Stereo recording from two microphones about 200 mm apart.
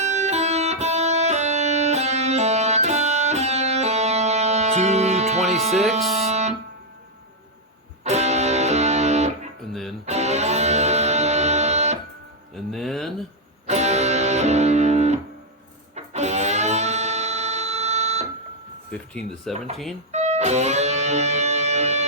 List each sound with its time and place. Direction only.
0.0 s music: 35° right (ahead or behind)
8.0 s music: 35° right (ahead or behind)
12.5 s music: centre (ahead or behind)
13.7 s music: 35° right (ahead or behind)
18.9 s a sound: 5° left (ahead or behind)
19.7 s speech: centre (ahead or behind)
20.1 s music: 35° right (ahead or behind)